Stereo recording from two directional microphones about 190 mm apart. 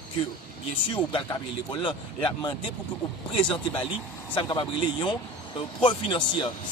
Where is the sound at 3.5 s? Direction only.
25° left (ahead or behind).